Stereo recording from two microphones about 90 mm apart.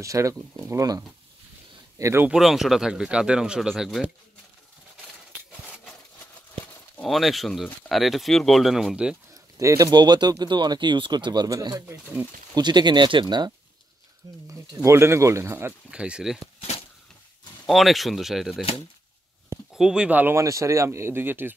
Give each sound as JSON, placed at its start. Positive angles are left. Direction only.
{"t": 0.0, "sound": "speech", "side_deg": -35}
{"t": 2.0, "sound": "speech", "side_deg": -35}
{"t": 2.3, "sound": "speech", "side_deg": -5}
{"t": 7.0, "sound": "speech", "side_deg": 0}
{"t": 9.3, "sound": "bird", "side_deg": -35}
{"t": 9.8, "sound": "speech", "side_deg": -50}
{"t": 11.4, "sound": "speech", "side_deg": -45}
{"t": 11.9, "sound": "speech", "side_deg": -20}
{"t": 12.5, "sound": "speech", "side_deg": -55}
{"t": 14.8, "sound": "speech", "side_deg": -30}
{"t": 15.9, "sound": "speech", "side_deg": -10}
{"t": 17.6, "sound": "speech", "side_deg": 0}
{"t": 19.7, "sound": "speech", "side_deg": -10}
{"t": 20.3, "sound": "speech", "side_deg": -35}